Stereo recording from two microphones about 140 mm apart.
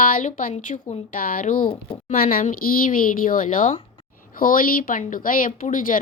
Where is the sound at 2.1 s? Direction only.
65° left (ahead or behind).